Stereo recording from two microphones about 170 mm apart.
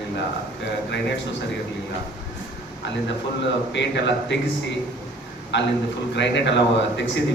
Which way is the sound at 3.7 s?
90° left.